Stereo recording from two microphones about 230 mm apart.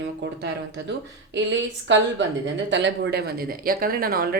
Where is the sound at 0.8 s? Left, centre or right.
Right.